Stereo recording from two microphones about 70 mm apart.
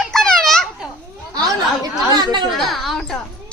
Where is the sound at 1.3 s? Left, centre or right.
Right.